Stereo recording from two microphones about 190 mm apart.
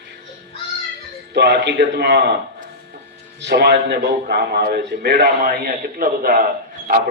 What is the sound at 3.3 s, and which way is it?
A man's voice, 60° right (ahead or behind).